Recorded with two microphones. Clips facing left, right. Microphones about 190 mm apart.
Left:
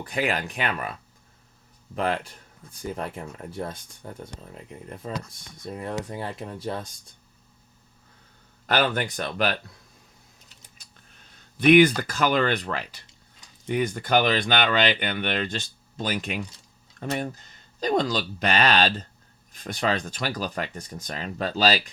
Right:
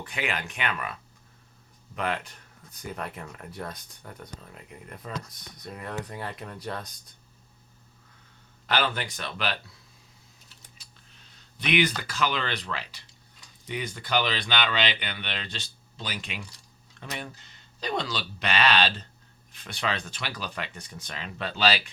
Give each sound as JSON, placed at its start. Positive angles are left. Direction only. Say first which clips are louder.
{"t": 0.0, "sound": "speech", "louder": "left 6 dB", "side_deg": 35}
{"t": 2.0, "sound": "speech", "louder": "left 4 dB", "side_deg": 30}
{"t": 8.6, "sound": "speech", "louder": "left 4 dB", "side_deg": 45}
{"t": 11.3, "sound": "speech", "louder": "left 10 dB", "side_deg": 50}